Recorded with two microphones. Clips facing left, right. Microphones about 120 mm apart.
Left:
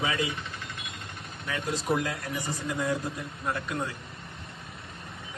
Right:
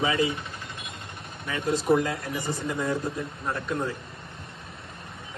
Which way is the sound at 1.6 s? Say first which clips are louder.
Right 6 dB; 60° right (ahead or behind).